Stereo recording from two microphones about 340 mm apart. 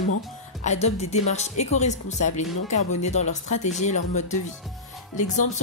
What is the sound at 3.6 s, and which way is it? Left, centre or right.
Speech, centre.